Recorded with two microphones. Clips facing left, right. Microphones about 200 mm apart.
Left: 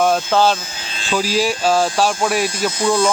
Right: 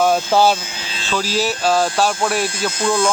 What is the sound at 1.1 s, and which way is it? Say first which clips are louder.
Speech: left 2 dB; 10° left (ahead or behind).